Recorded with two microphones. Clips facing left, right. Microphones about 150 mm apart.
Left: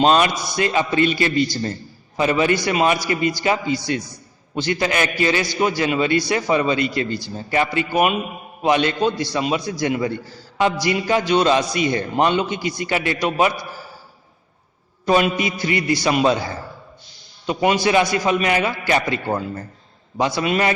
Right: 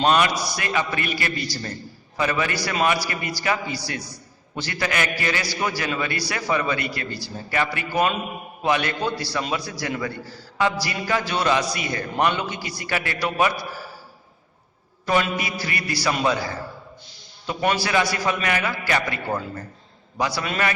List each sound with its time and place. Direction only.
0.0 s a man's voice: 25° left (ahead or behind)
15.0 s a man's voice: 20° left (ahead or behind)